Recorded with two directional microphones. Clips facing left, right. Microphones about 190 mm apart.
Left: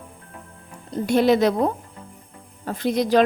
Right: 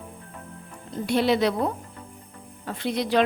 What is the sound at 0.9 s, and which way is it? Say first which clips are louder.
A woman's voice: left 4 dB; 45° left (ahead or behind).